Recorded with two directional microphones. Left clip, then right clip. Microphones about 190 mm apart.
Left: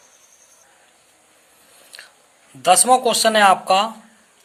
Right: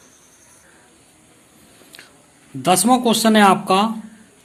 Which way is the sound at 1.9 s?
20° left (ahead or behind).